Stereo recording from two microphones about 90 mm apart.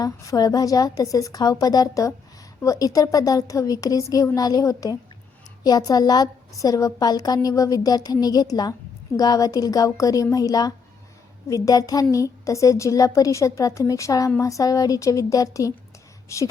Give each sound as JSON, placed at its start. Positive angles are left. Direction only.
{"t": 0.0, "sound": "a woman's voice", "side_deg": 40}